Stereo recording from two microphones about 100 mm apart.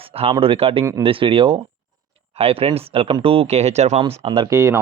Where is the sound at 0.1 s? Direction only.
70° right (ahead or behind).